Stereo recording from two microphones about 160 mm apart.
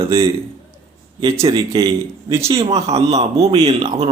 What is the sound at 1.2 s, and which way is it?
Speech, 35° right (ahead or behind).